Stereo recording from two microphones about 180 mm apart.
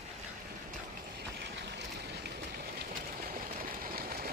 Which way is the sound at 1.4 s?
70° right (ahead or behind).